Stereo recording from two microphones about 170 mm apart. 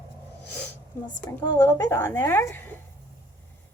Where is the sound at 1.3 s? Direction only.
20° left (ahead or behind).